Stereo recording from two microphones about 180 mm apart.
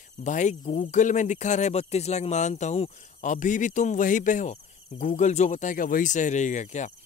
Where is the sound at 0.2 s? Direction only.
40° left (ahead or behind).